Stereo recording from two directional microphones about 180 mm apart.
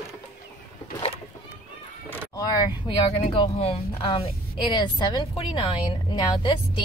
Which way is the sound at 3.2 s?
35° left (ahead or behind).